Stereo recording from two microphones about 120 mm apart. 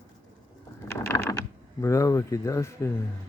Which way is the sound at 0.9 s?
25° left (ahead or behind).